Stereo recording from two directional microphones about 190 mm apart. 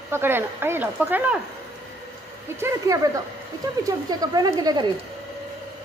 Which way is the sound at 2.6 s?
15° right (ahead or behind).